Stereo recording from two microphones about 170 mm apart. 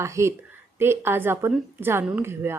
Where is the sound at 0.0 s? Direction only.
15° right (ahead or behind).